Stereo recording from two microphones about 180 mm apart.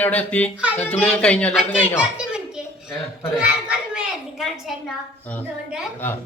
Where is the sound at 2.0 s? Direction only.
5° right (ahead or behind).